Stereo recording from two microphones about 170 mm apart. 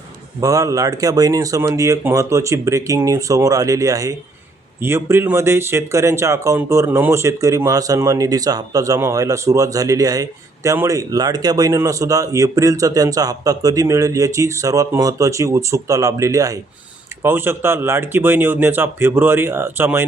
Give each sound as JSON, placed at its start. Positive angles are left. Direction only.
{"t": 0.3, "sound": "speech", "side_deg": -20}